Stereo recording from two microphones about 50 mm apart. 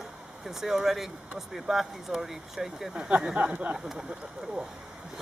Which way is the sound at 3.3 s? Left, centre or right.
Right.